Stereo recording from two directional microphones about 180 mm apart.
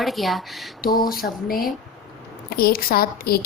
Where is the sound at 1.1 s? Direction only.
55° left (ahead or behind).